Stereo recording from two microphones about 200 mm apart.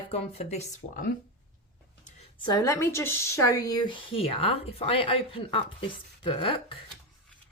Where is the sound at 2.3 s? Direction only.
20° left (ahead or behind).